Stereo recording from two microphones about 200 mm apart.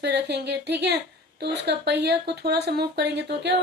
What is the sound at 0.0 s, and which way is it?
Speech, 55° right (ahead or behind).